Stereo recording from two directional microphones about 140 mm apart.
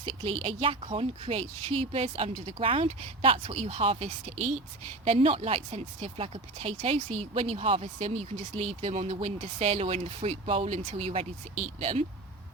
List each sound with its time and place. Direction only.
0.3 s speech: 40° right (ahead or behind)